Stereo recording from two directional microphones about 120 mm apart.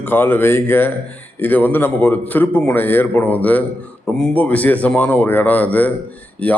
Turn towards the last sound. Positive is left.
turn(degrees=10)  # may be behind; listen again after turning